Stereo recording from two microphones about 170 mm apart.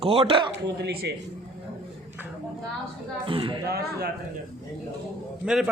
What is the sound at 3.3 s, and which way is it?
Speech, 30° right (ahead or behind).